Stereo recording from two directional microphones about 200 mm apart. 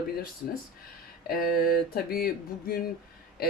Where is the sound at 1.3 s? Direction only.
50° left (ahead or behind).